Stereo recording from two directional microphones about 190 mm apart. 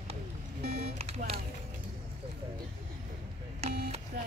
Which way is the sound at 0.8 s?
30° right (ahead or behind).